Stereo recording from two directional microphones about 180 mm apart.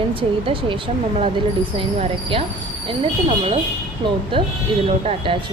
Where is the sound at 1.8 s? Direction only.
30° right (ahead or behind).